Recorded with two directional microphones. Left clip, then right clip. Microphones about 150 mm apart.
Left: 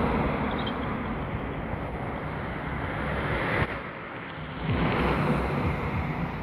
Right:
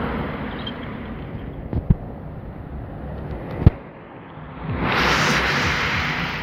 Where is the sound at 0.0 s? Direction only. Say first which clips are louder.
Even; 20° left (ahead or behind).